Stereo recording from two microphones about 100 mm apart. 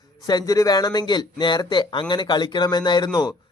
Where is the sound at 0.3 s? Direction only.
40° left (ahead or behind).